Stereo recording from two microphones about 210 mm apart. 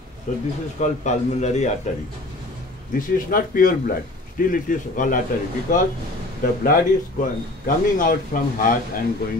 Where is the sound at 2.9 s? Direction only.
40° left (ahead or behind).